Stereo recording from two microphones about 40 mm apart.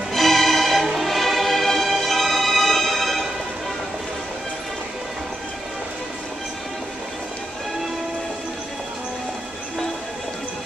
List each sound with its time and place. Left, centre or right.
0.1 s music: centre